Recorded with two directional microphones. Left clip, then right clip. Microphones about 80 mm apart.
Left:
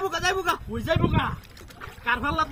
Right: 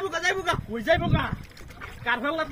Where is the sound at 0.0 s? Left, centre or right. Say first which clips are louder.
Left 1 dB; centre.